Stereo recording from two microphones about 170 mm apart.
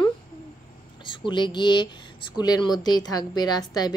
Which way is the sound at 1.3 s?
25° left (ahead or behind).